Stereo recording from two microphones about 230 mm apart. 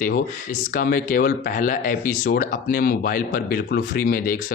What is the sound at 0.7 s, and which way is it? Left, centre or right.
Speech, left.